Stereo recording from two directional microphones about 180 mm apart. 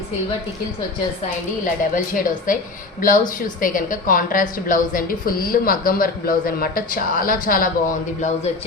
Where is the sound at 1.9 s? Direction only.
50° left (ahead or behind).